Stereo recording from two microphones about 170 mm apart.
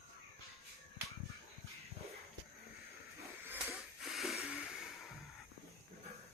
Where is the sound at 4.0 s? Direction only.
Centre (ahead or behind).